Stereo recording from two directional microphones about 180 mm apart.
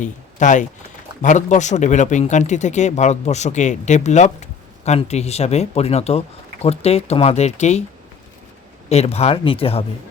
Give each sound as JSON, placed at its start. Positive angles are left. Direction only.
{"t": 0.0, "sound": "speech", "side_deg": 45}
{"t": 8.9, "sound": "speech", "side_deg": 35}